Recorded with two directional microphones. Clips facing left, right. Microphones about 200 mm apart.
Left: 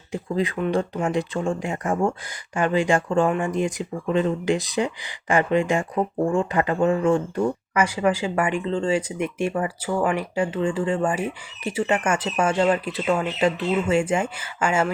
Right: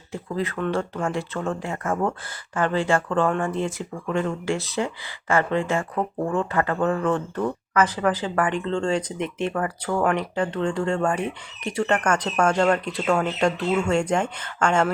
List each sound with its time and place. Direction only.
0.1 s speech: 15° left (ahead or behind)